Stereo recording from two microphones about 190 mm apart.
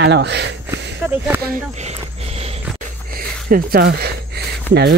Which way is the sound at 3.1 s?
50° right (ahead or behind).